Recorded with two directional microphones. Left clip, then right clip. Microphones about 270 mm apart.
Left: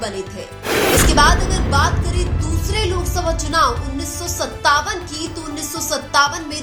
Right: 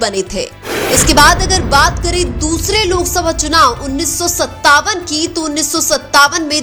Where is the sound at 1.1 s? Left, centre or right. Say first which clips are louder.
Right 6 dB; right.